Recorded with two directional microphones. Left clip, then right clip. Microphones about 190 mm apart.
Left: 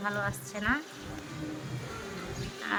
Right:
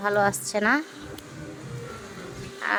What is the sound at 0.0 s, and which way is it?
Speech, 30° right (ahead or behind).